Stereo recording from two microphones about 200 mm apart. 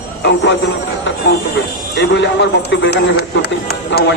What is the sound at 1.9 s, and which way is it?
Speech, 65° left (ahead or behind).